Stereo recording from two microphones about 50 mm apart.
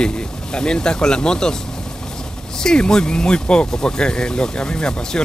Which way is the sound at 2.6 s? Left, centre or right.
Centre.